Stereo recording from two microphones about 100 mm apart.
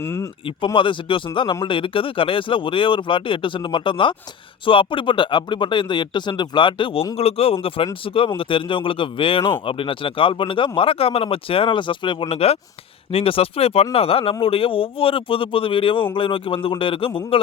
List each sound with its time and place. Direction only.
0.0 s speech: 25° left (ahead or behind)
0.4 s speech: 60° left (ahead or behind)
7.2 s speech: 85° left; by 12.1 s 55° left (ahead or behind)
12.3 s speech: 90° left
13.1 s speech: 70° left (ahead or behind)